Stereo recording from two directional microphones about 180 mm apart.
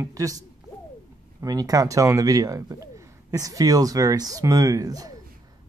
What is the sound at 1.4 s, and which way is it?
Speech, 20° right (ahead or behind).